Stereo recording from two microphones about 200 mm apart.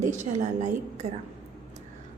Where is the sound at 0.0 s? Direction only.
35° right (ahead or behind).